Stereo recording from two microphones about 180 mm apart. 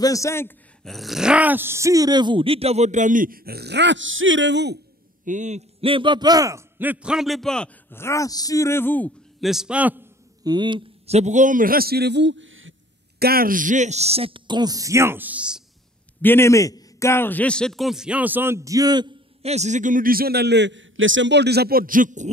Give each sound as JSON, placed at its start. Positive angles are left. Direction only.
{"t": 0.0, "sound": "a man's voice", "side_deg": 15}
{"t": 0.8, "sound": "speech", "side_deg": 0}
{"t": 5.2, "sound": "a man's voice", "side_deg": -45}
{"t": 9.5, "sound": "a man's voice", "side_deg": -5}
{"t": 10.4, "sound": "a man's voice", "side_deg": -25}
{"t": 13.2, "sound": "speech", "side_deg": -55}
{"t": 16.2, "sound": "a man's voice", "side_deg": 10}
{"t": 19.4, "sound": "a man's voice", "side_deg": -40}